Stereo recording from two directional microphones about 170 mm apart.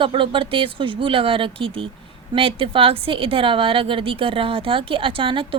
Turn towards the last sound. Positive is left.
turn(degrees=-30)  # may be behind; listen again after turning